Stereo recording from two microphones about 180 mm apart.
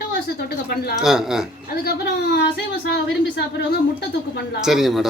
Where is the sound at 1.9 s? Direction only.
60° left (ahead or behind).